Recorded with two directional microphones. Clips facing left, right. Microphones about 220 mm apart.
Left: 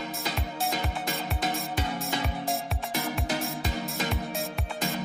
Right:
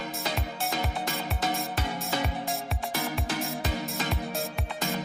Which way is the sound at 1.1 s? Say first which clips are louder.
Right 2 dB; centre (ahead or behind).